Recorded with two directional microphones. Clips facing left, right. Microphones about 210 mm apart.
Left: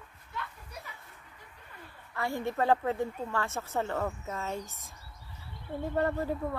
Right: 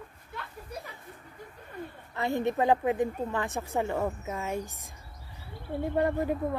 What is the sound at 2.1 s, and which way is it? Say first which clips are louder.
A woman's voice: right 4 dB; 20° right (ahead or behind).